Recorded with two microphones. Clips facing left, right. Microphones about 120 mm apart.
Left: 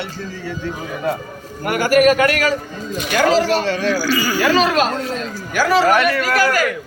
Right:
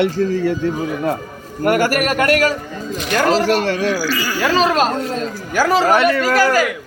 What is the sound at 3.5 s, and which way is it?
Speech, 60° right (ahead or behind).